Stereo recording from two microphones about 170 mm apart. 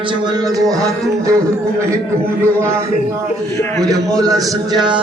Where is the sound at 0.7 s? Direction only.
20° right (ahead or behind).